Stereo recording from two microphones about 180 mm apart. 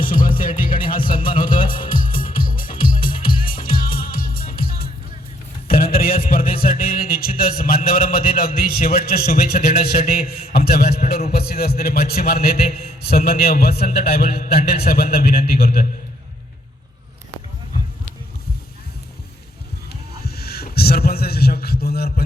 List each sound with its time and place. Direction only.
0.0 s music: 50° left (ahead or behind)
0.3 s a man's voice: 50° left (ahead or behind)
1.3 s music: 30° left (ahead or behind)
1.9 s music: 50° left (ahead or behind)
6.6 s a man's voice: 55° left (ahead or behind)
19.9 s a sound: 60° left (ahead or behind)